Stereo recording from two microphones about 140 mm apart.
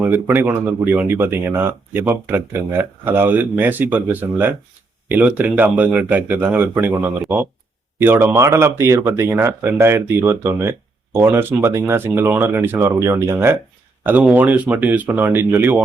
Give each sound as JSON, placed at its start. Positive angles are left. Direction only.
{"t": 0.0, "sound": "speech", "side_deg": -15}